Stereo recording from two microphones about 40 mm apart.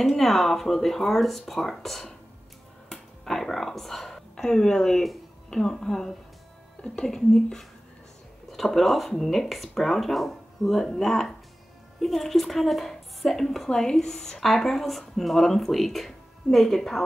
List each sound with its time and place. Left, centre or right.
0.0 s speech: centre
2.9 s a sound: centre
5.5 s speech: centre
13.7 s speech: centre
14.4 s speech: centre